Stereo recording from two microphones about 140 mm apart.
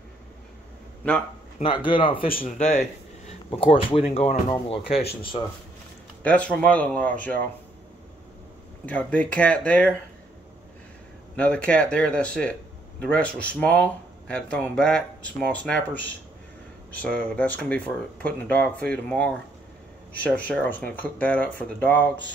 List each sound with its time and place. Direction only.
1.6 s speech: 35° left (ahead or behind)
2.2 s speech: 80° left
3.5 s speech: 40° left (ahead or behind)
6.2 s speech: 10° left (ahead or behind)
8.8 s speech: 10° left (ahead or behind)
11.3 s speech: 10° left (ahead or behind)
17.0 s speech: 10° left (ahead or behind)